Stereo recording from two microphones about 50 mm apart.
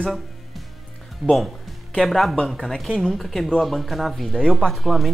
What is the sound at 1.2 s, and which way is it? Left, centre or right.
Speech, right.